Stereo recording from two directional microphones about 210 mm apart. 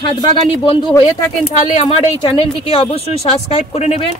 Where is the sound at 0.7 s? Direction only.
25° left (ahead or behind).